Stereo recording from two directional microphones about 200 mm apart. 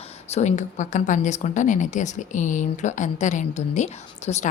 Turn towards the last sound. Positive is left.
turn(degrees=35)  # may be behind; listen again after turning